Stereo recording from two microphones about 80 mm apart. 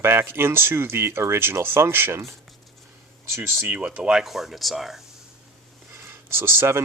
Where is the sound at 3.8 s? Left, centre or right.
Centre.